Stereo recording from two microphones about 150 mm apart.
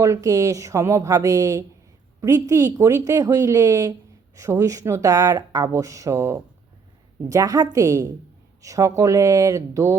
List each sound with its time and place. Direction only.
0.0 s speech: 20° right (ahead or behind)